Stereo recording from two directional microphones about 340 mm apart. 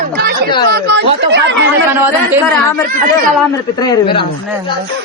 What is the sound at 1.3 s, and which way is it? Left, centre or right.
Speech, right.